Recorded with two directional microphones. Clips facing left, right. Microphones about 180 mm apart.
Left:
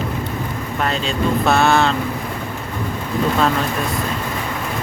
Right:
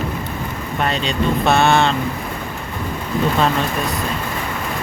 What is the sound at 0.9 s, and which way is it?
Speech, centre (ahead or behind).